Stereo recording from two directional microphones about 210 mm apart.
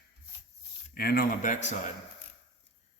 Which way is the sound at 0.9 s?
45° left (ahead or behind).